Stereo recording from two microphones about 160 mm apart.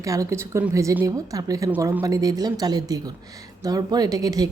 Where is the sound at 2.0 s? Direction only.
25° right (ahead or behind).